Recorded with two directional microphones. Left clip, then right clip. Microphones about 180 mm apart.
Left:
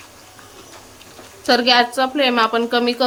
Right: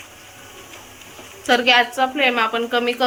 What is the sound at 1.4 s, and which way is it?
A woman's voice, 45° left (ahead or behind).